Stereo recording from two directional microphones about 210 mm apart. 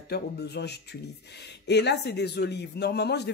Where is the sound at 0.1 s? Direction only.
50° left (ahead or behind).